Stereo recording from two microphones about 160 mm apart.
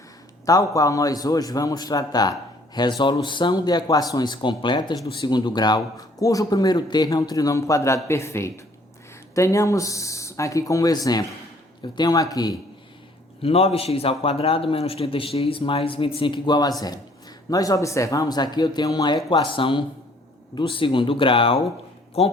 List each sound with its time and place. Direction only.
0.4 s speech: 20° left (ahead or behind)
13.4 s a man's voice: 40° left (ahead or behind)